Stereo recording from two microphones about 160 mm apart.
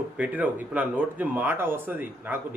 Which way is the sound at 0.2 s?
10° right (ahead or behind).